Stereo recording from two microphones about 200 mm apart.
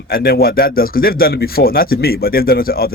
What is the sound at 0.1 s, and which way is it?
Speech, 50° left (ahead or behind).